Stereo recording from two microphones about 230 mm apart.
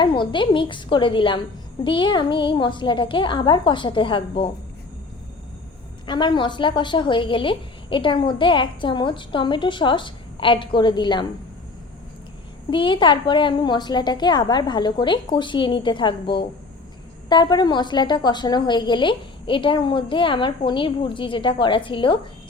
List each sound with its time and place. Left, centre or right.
0.0 s a woman's voice: centre
6.1 s a woman's voice: centre
12.7 s a woman's voice: left